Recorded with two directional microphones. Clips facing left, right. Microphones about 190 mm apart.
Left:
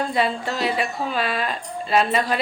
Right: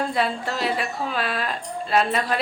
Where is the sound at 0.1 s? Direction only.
Centre (ahead or behind).